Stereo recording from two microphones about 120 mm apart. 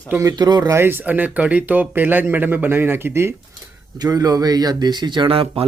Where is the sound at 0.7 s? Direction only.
20° right (ahead or behind).